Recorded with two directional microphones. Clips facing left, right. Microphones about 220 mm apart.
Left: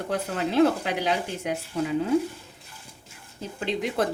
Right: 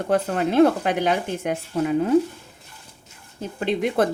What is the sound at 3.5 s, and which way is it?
Speech, 55° right (ahead or behind).